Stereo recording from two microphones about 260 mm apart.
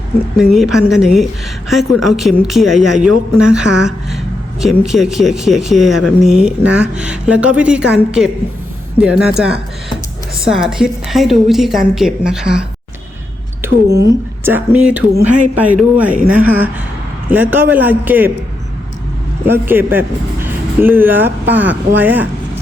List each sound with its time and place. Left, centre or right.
0.5 s speech: centre
13.8 s speech: right
14.1 s speech: centre
19.5 s a man's voice: centre